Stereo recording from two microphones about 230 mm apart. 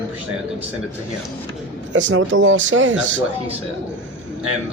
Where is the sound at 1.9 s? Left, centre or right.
Right.